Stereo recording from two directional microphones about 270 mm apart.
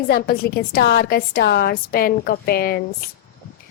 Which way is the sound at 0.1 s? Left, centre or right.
Left.